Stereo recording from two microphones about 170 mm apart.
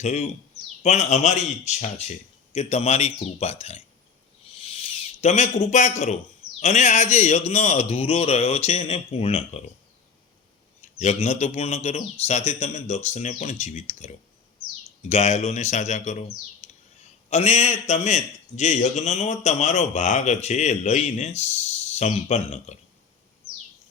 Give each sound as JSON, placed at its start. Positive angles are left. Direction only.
{"t": 0.0, "sound": "a man's voice", "side_deg": 45}
{"t": 4.5, "sound": "a sound", "side_deg": 35}
{"t": 6.6, "sound": "a man's voice", "side_deg": 45}
{"t": 10.8, "sound": "a man's voice", "side_deg": 40}